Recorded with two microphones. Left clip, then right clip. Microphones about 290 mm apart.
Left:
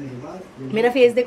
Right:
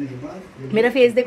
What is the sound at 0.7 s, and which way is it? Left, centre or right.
Speech, centre.